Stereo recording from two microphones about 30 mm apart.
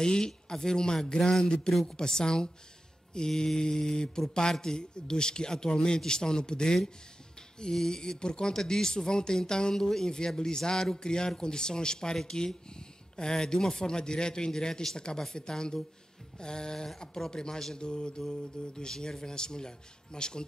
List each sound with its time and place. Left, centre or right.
0.0 s a man's voice: left